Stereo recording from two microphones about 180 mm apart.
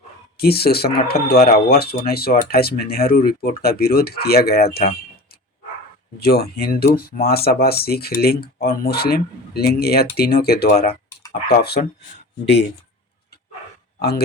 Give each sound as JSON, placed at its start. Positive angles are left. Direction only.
{"t": 0.3, "sound": "speech", "side_deg": 60}
{"t": 6.1, "sound": "speech", "side_deg": 60}